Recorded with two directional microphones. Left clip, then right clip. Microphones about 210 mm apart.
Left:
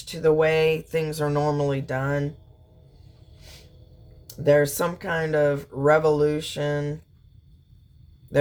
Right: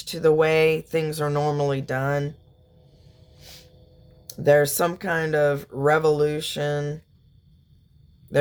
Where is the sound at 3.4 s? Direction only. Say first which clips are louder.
Right 3 dB; 55° right (ahead or behind).